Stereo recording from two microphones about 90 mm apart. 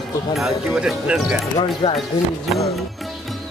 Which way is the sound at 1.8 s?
75° left (ahead or behind).